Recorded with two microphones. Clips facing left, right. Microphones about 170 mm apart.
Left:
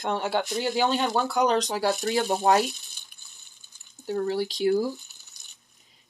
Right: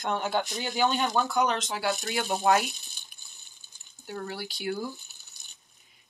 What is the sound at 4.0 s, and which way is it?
Speech, 35° left (ahead or behind).